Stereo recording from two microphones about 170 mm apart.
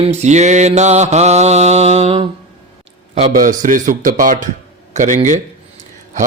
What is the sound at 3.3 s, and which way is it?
Mantra, 50° right (ahead or behind).